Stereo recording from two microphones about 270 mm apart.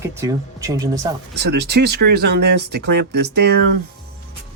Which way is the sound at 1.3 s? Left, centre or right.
Right.